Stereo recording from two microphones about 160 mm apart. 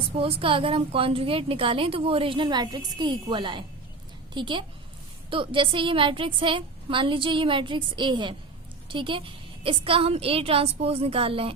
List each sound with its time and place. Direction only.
0.2 s a woman's voice: 35° right (ahead or behind)